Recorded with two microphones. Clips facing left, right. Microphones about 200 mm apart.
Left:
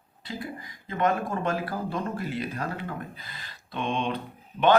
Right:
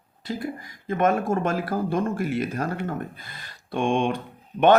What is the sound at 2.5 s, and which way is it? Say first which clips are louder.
Speech: right 5 dB; 45° right (ahead or behind).